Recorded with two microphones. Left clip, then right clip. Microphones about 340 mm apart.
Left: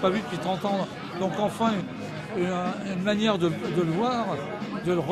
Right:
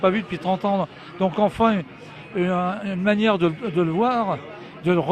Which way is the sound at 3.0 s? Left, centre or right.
Right.